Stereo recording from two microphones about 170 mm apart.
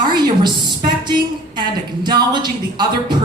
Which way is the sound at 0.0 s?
25° right (ahead or behind).